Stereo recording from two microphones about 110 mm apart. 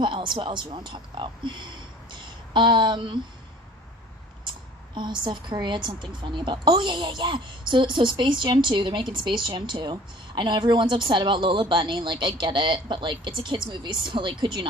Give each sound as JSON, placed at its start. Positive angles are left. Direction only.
{"t": 0.0, "sound": "speech", "side_deg": -45}
{"t": 4.9, "sound": "speech", "side_deg": -45}